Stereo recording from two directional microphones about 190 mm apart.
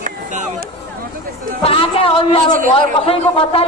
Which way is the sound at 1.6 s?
30° left (ahead or behind).